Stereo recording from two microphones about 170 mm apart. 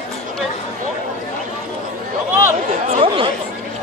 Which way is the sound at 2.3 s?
15° right (ahead or behind).